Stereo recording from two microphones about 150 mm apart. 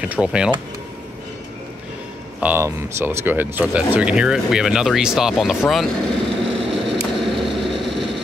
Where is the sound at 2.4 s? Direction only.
15° right (ahead or behind).